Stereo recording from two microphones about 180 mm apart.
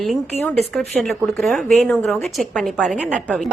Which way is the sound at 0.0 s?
5° left (ahead or behind).